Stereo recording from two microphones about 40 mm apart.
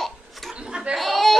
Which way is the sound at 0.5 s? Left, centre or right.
Right.